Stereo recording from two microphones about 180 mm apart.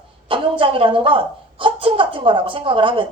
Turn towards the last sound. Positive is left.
turn(degrees=-30)  # may be behind; listen again after turning